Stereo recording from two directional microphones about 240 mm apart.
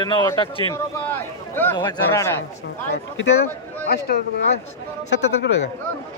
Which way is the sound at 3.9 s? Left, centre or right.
Left.